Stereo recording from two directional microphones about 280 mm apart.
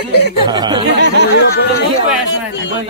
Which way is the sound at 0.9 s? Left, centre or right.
Right.